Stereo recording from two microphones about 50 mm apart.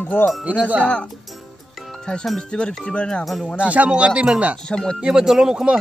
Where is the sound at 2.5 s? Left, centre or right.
Centre.